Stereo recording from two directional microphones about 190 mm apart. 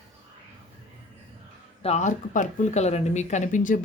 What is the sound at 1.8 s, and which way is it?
Speech, 35° left (ahead or behind).